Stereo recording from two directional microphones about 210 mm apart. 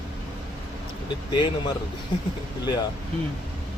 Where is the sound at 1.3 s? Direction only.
20° left (ahead or behind).